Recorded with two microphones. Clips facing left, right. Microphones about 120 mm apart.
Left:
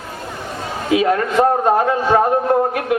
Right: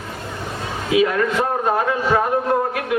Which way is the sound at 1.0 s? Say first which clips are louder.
Left 2 dB; 40° left (ahead or behind).